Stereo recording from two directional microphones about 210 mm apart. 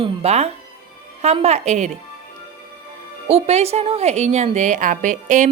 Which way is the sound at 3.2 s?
30° right (ahead or behind).